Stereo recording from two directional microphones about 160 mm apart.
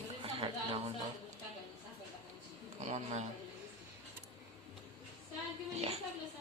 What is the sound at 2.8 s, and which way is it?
Speech, 50° right (ahead or behind).